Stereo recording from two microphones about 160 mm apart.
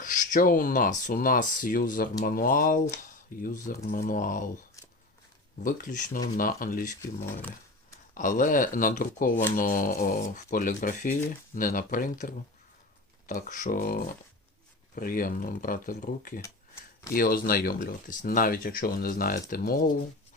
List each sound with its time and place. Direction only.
0.0 s speech: 55° left (ahead or behind)
5.6 s speech: 60° left (ahead or behind)
8.1 s speech: 55° left (ahead or behind)